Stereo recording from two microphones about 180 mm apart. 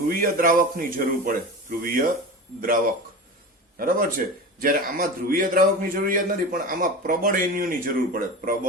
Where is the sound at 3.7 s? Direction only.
50° right (ahead or behind).